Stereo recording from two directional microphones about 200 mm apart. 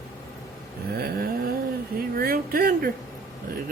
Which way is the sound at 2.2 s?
45° right (ahead or behind).